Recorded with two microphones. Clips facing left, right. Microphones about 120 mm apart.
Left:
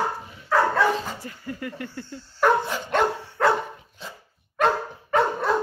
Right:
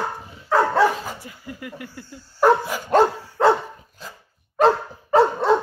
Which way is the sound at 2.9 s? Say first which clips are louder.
Right 6 dB; 40° right (ahead or behind).